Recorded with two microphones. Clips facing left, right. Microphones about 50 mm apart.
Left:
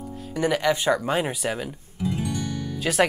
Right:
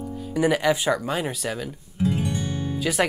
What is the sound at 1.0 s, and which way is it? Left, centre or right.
Speech, centre.